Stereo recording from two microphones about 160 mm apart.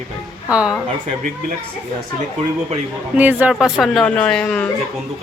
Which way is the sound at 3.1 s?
10° right (ahead or behind).